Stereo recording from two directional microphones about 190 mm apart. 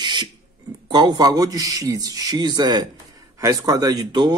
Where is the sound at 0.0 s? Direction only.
25° right (ahead or behind).